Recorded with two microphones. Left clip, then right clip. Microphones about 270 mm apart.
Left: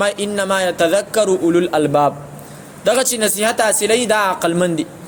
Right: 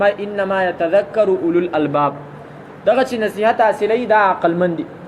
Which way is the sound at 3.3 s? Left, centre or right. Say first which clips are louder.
Right 4 dB; left.